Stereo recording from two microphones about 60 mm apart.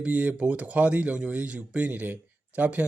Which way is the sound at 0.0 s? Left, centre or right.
Right.